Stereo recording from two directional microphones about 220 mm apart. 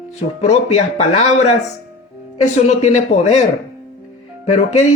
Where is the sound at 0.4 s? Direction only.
30° left (ahead or behind).